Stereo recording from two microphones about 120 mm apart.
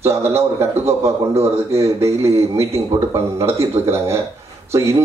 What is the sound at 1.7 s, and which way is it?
A man's voice, 25° right (ahead or behind).